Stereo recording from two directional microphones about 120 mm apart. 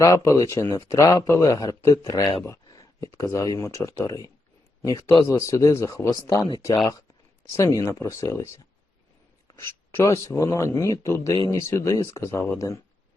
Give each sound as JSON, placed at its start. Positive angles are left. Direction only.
{"t": 0.3, "sound": "speech", "side_deg": 25}
{"t": 7.5, "sound": "speech", "side_deg": 25}